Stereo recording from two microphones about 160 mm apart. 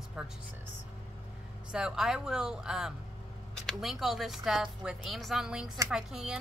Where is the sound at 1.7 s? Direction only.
5° right (ahead or behind).